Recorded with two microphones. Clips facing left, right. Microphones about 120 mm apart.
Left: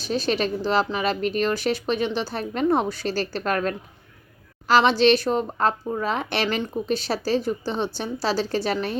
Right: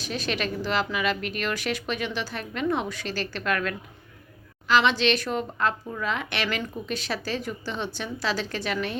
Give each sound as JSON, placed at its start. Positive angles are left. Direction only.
{"t": 0.0, "sound": "speech", "side_deg": 35}